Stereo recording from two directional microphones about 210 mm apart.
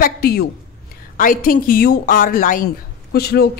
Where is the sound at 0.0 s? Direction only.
50° left (ahead or behind).